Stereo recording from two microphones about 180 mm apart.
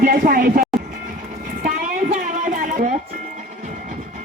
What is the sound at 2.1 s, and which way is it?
Music, 45° right (ahead or behind).